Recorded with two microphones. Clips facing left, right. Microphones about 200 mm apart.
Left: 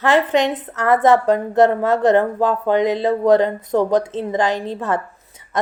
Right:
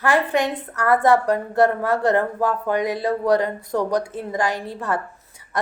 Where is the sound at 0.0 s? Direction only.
20° left (ahead or behind).